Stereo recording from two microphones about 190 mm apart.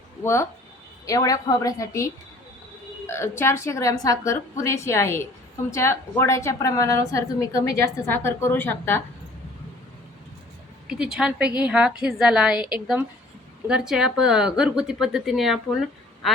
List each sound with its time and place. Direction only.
0.2 s a woman's voice: 15° left (ahead or behind)
3.1 s a woman's voice: 15° left (ahead or behind)
10.8 s speech: 5° right (ahead or behind)